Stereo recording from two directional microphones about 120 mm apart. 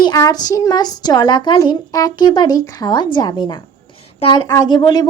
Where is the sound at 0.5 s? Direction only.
30° left (ahead or behind).